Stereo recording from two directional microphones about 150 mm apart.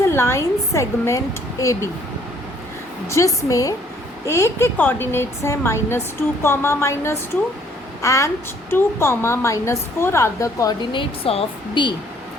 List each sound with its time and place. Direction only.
0.1 s a woman's voice: 20° left (ahead or behind)
3.1 s a woman's voice: 20° left (ahead or behind)
10.9 s speech: 40° left (ahead or behind)